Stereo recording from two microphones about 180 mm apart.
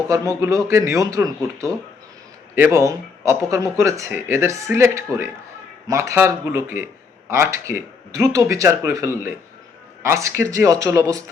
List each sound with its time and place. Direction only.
0.1 s speech: 15° right (ahead or behind)